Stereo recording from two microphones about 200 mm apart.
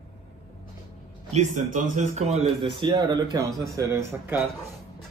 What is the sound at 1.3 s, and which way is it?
A man's voice, 40° right (ahead or behind).